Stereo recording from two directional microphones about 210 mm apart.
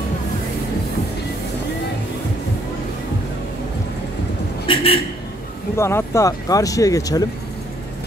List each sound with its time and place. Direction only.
4.6 s a man's voice: 25° left (ahead or behind)
5.8 s speech: 10° left (ahead or behind)